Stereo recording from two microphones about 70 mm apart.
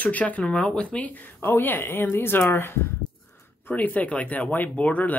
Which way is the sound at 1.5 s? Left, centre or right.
Left.